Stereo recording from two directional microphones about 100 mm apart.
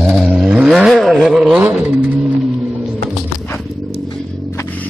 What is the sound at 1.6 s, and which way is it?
Vehicle, 15° right (ahead or behind).